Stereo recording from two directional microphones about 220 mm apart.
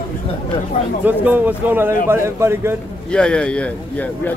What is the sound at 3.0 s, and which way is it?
Speech, 5° left (ahead or behind).